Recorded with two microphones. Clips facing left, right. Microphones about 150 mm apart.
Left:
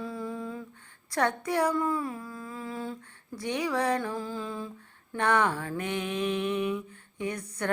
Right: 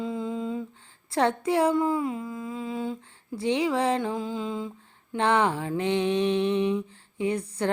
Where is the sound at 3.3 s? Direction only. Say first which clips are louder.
Right 5 dB; 25° right (ahead or behind).